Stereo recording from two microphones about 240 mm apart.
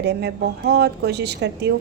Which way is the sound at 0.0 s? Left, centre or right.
Right.